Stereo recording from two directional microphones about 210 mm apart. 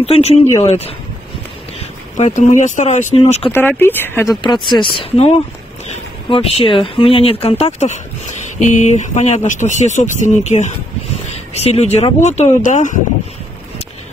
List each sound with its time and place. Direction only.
0.0 s speech: 30° left (ahead or behind)
2.1 s speech: 35° left (ahead or behind)
3.5 s speech: 10° left (ahead or behind); by 5.3 s 25° left (ahead or behind)
6.3 s speech: 30° left (ahead or behind)